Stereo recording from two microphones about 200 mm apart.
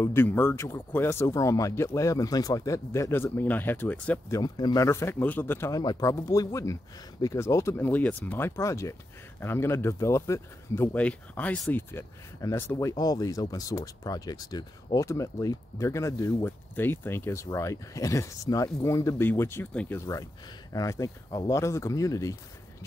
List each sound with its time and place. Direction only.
0.0 s speech: 10° left (ahead or behind)
4.4 s speech: 20° left (ahead or behind)